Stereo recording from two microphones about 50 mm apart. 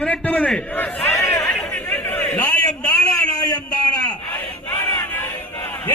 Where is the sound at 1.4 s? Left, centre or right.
Left.